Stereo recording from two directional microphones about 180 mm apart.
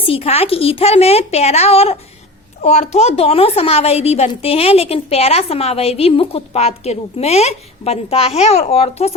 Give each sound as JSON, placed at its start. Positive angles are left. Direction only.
{"t": 0.0, "sound": "a woman's voice", "side_deg": 30}